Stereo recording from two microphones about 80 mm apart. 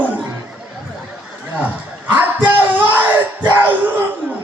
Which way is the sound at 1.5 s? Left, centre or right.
Right.